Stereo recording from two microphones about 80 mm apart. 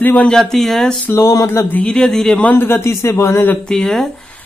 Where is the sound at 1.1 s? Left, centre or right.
Left.